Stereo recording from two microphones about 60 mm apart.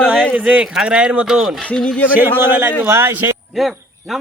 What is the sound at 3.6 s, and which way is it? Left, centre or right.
Speech, centre.